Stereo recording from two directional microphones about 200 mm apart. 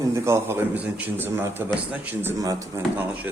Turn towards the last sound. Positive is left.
turn(degrees=-15)  # may be behind; listen again after turning